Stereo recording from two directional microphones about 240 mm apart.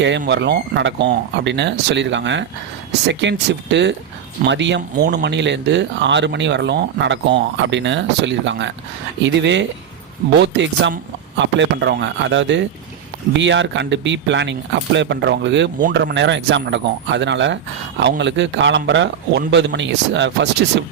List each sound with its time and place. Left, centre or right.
0.3 s speech: right